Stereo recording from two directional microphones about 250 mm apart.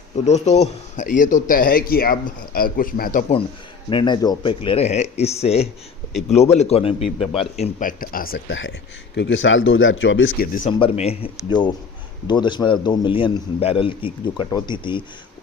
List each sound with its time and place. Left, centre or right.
0.3 s a man's voice: left
3.8 s a man's voice: centre; by 8.4 s left
8.4 s speech: left
10.3 s a man's voice: left
10.7 s a man's voice: left